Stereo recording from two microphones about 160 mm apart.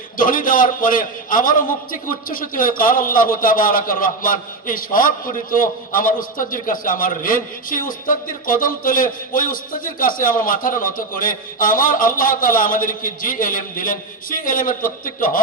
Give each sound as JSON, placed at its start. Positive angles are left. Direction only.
{"t": 0.2, "sound": "a man's voice", "side_deg": 60}